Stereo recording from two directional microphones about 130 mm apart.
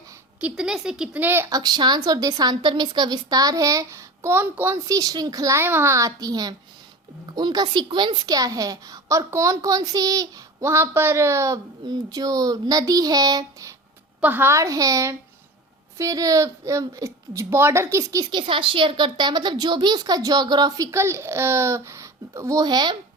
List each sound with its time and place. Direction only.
0.3 s a woman's voice: 10° right (ahead or behind); by 13.7 s 25° right (ahead or behind)
14.2 s a woman's voice: 15° right (ahead or behind); by 23.0 s 35° right (ahead or behind)